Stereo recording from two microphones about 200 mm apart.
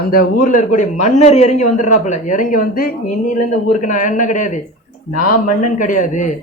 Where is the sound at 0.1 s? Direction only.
45° left (ahead or behind).